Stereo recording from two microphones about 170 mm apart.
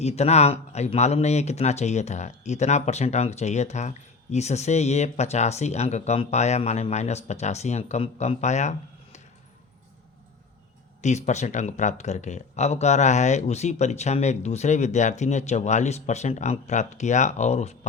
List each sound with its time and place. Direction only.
0.0 s speech: 40° left (ahead or behind)
11.0 s speech: 45° left (ahead or behind)